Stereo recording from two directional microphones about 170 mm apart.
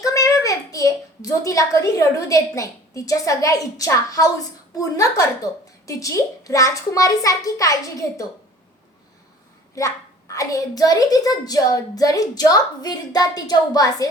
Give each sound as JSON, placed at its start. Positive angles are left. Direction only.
{"t": 0.0, "sound": "a child's voice", "side_deg": 20}
{"t": 9.7, "sound": "a child's voice", "side_deg": 20}